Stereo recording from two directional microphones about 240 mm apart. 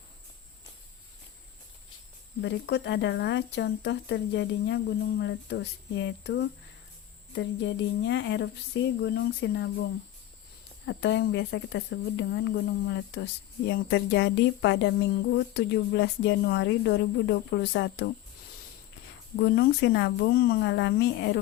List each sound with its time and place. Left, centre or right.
2.4 s speech: left
10.8 s speech: left
19.4 s speech: left